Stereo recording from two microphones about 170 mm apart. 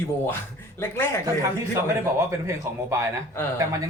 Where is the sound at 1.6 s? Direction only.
15° right (ahead or behind).